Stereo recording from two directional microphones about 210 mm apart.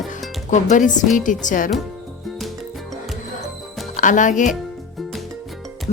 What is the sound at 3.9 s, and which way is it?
Speech, 35° left (ahead or behind).